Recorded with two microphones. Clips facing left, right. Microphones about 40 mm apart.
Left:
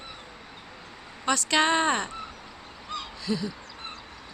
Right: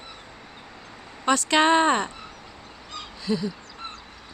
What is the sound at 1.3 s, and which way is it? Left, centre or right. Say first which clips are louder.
Speech: right 4 dB; centre.